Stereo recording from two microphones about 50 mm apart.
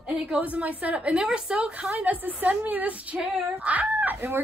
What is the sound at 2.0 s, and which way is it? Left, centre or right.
A woman's voice, right.